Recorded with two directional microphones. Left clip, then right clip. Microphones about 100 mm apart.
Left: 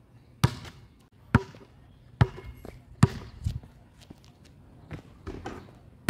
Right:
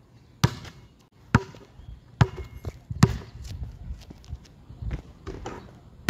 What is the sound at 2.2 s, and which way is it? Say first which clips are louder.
Basketball bounce: right 3 dB; 45° right (ahead or behind).